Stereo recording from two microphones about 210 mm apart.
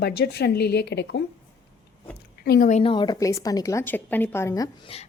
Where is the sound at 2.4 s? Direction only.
45° left (ahead or behind).